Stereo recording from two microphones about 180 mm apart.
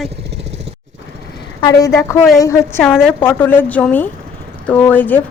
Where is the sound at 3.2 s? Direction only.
10° left (ahead or behind).